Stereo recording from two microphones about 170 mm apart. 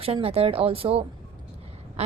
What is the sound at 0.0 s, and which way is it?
A woman's voice, 35° right (ahead or behind).